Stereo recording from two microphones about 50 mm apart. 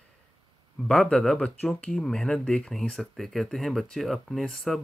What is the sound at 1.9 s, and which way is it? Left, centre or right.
Speech, centre.